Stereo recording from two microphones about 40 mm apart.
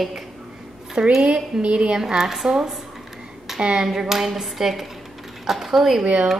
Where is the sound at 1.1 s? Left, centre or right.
Right.